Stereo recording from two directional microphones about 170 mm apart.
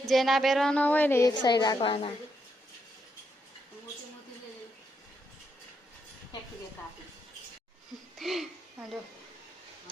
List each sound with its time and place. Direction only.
0.1 s speech: centre (ahead or behind)
1.3 s a woman's voice: 25° left (ahead or behind)
8.2 s speech: centre (ahead or behind)